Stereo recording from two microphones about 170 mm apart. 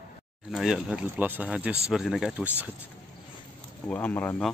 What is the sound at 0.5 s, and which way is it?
Speech, 5° right (ahead or behind).